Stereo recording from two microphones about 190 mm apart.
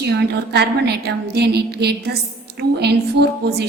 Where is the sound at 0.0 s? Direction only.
60° right (ahead or behind).